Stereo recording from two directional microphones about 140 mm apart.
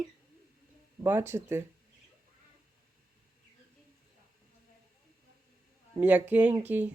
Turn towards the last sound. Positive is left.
turn(degrees=-10)  # may be behind; listen again after turning